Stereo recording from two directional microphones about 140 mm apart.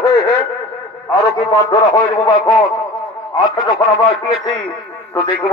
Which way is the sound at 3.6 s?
30° left (ahead or behind).